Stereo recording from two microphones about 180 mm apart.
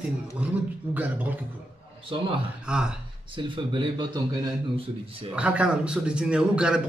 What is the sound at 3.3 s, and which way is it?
Speech, 25° right (ahead or behind).